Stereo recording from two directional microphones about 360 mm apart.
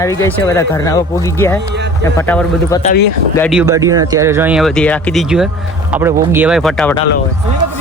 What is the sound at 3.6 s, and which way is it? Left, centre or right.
Speech, centre.